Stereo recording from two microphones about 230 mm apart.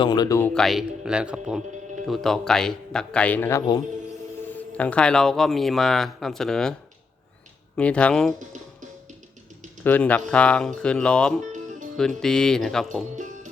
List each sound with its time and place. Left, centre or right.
0.0 s speech: centre
7.8 s speech: centre
9.8 s speech: centre
13.1 s music: right